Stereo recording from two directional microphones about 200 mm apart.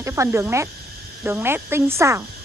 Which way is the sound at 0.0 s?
15° right (ahead or behind).